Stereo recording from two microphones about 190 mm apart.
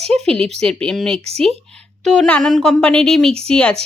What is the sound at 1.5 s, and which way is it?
Speech, 30° right (ahead or behind).